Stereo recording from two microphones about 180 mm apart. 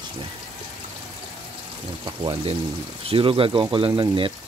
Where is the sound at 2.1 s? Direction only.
25° right (ahead or behind).